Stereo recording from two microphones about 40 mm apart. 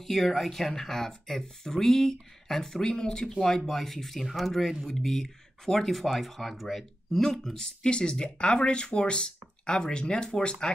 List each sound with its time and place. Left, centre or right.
0.0 s speech: centre
7.2 s speech: centre